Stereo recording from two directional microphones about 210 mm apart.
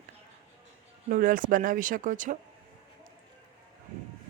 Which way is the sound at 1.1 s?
40° right (ahead or behind).